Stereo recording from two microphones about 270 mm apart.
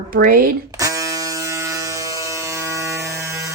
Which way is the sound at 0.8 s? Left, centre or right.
Centre.